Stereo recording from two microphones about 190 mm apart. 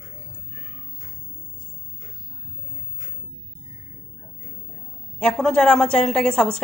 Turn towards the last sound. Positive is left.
turn(degrees=5)  # may be behind; listen again after turning